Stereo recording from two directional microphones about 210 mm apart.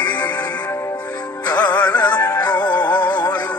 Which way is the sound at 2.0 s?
5° left (ahead or behind).